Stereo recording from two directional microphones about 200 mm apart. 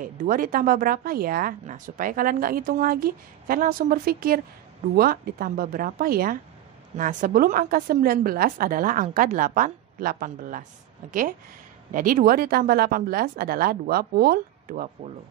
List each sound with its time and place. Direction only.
0.0 s speech: 45° right (ahead or behind)